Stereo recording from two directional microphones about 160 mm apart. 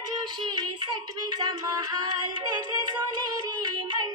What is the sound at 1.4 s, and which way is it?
Music, 25° right (ahead or behind).